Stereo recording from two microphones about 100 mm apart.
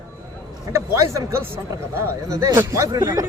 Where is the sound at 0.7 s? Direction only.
30° right (ahead or behind).